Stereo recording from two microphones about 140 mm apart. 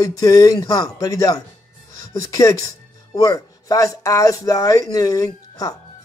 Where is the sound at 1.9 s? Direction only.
25° left (ahead or behind).